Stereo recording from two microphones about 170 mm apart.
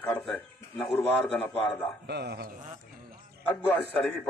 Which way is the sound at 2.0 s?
75° right (ahead or behind).